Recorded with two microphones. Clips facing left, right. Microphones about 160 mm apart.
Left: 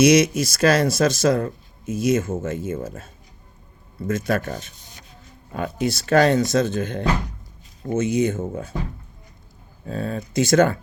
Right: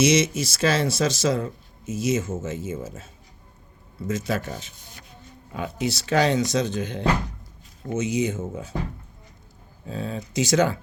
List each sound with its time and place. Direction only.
0.0 s speech: 60° left (ahead or behind)
9.8 s speech: 55° left (ahead or behind)